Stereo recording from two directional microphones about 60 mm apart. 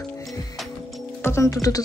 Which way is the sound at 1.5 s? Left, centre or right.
Left.